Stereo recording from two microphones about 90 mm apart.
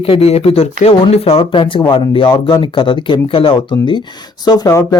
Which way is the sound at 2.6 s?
70° left (ahead or behind).